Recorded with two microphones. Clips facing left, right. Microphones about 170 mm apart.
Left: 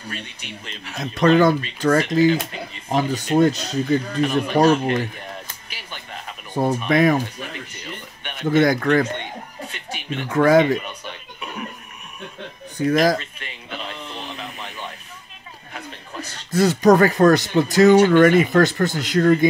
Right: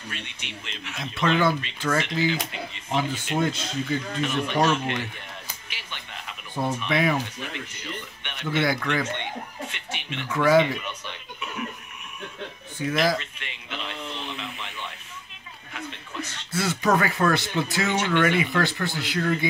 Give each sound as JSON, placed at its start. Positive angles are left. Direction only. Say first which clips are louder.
{"t": 0.1, "sound": "speech", "louder": "left 5 dB", "side_deg": 40}
{"t": 5.7, "sound": "music", "louder": "left 5 dB", "side_deg": 40}
{"t": 8.2, "sound": "speech", "louder": "left 9 dB", "side_deg": 40}
{"t": 12.7, "sound": "a sound", "louder": "left 6 dB", "side_deg": 40}
{"t": 14.3, "sound": "radio", "louder": "left 2 dB", "side_deg": 40}
{"t": 15.7, "sound": "speech", "louder": "left 1 dB", "side_deg": 35}